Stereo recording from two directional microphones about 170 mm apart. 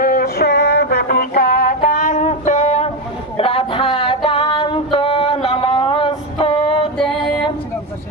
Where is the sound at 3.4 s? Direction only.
35° left (ahead or behind).